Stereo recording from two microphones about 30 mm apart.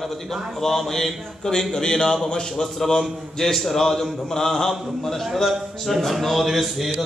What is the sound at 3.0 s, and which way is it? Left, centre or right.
A man's voice, centre.